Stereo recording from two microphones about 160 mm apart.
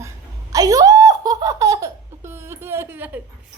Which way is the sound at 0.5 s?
25° right (ahead or behind).